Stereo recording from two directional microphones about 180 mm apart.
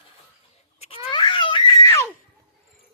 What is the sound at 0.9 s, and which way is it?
Baby cry, 30° left (ahead or behind).